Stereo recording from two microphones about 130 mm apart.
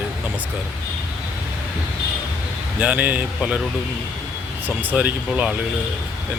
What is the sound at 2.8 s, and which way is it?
Speech, 10° right (ahead or behind).